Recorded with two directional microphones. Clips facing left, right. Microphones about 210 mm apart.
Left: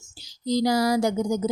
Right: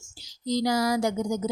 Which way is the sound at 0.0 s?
30° left (ahead or behind).